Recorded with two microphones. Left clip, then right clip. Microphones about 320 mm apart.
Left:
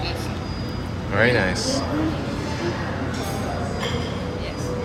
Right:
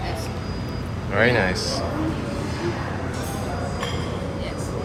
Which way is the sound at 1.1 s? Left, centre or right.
Centre.